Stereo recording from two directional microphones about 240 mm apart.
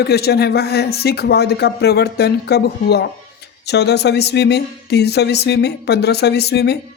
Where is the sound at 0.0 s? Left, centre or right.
Left.